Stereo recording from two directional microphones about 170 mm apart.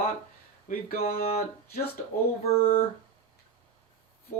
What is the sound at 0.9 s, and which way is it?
Speech, 60° left (ahead or behind).